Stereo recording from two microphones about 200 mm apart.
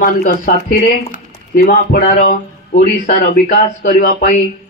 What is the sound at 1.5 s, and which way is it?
Speech, 50° left (ahead or behind).